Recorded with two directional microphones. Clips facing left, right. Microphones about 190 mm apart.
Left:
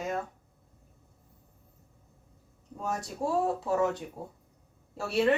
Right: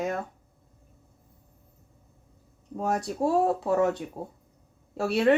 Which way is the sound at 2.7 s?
65° right (ahead or behind).